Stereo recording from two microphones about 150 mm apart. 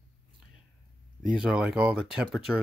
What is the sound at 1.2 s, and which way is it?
Speech, 5° right (ahead or behind).